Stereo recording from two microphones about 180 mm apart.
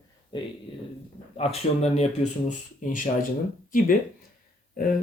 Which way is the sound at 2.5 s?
45° left (ahead or behind).